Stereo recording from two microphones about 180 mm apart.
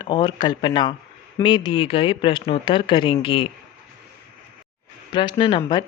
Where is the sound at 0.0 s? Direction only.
25° left (ahead or behind).